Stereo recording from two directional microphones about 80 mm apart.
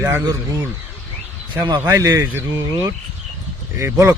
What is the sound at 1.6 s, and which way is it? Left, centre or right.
Speech, right.